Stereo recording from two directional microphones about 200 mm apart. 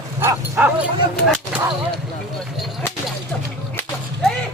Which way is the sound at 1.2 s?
Centre (ahead or behind).